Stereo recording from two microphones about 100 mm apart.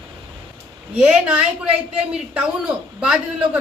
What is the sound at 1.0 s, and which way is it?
A woman's voice, 10° right (ahead or behind).